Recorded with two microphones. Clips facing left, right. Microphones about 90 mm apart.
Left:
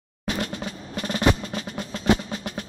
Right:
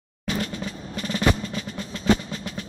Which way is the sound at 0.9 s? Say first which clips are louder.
Left 1 dB; 40° left (ahead or behind).